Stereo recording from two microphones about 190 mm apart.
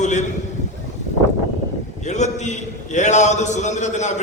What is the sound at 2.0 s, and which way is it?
A man's voice, 40° left (ahead or behind).